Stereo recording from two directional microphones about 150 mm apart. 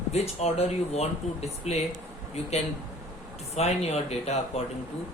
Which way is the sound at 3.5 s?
45° left (ahead or behind).